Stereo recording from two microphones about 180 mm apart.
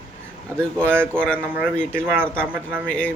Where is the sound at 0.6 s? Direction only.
5° left (ahead or behind).